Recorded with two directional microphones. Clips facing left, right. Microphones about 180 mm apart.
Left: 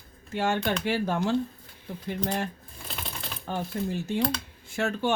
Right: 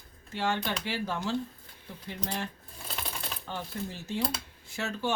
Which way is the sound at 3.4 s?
45° left (ahead or behind).